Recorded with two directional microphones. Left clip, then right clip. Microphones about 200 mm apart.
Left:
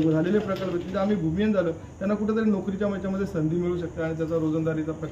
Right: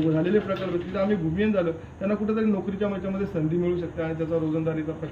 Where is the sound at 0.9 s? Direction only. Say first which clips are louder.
Right 1 dB; 15° left (ahead or behind).